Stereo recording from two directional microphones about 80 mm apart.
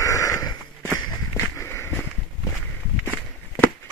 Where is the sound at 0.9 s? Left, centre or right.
Left.